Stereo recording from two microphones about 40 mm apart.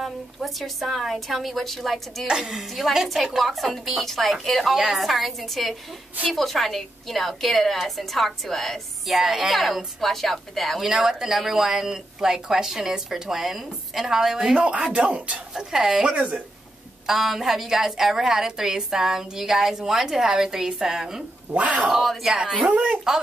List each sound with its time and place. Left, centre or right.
0.0 s a woman's voice: centre
2.2 s a woman's voice: centre
2.5 s a woman's voice: centre
4.7 s a woman's voice: centre
10.8 s a woman's voice: centre
14.7 s speech: right
15.5 s a woman's voice: centre
17.0 s a woman's voice: centre
21.5 s speech: right
21.9 s a woman's voice: centre
22.6 s speech: right